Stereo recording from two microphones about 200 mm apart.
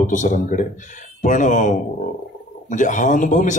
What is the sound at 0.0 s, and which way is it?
Speech, 40° left (ahead or behind).